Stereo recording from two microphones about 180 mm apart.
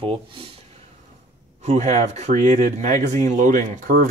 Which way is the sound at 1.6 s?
40° right (ahead or behind).